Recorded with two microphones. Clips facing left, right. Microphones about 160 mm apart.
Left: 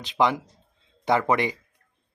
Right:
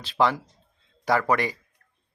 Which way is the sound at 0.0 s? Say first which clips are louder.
Even; 20° left (ahead or behind).